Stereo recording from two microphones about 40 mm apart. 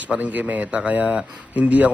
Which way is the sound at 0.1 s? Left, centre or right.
Right.